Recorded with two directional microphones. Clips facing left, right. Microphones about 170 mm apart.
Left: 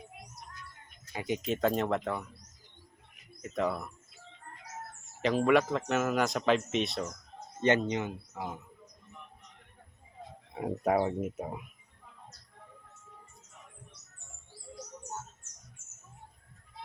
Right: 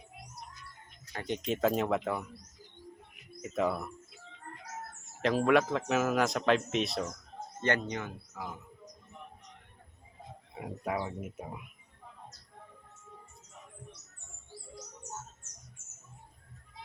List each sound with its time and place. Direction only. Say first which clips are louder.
1.1 s a man's voice: left 1 dB; 10° left (ahead or behind)
3.4 s speech: right 1 dB; 5° right (ahead or behind)
5.2 s a man's voice: even; centre (ahead or behind)
7.6 s speech: left 5 dB; 20° left (ahead or behind)
10.8 s speech: left 7 dB; 40° left (ahead or behind)